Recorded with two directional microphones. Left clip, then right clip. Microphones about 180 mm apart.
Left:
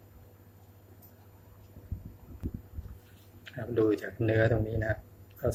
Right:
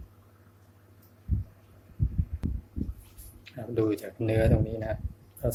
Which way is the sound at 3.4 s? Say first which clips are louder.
Left 1 dB; 15° right (ahead or behind).